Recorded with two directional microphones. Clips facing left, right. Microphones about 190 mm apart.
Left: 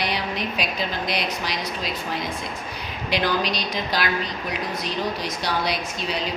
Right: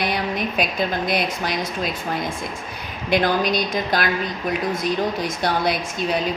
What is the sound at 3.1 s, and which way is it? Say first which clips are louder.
A woman's voice: right 5 dB; 50° right (ahead or behind).